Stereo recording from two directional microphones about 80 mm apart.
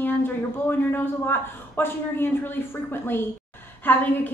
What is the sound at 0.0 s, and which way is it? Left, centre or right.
A woman's voice, left.